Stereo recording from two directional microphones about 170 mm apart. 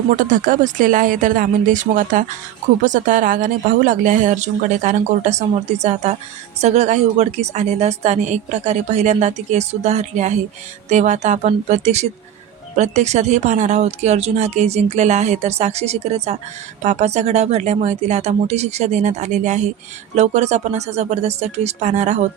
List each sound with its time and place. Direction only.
0.2 s a woman's voice: 50° right (ahead or behind)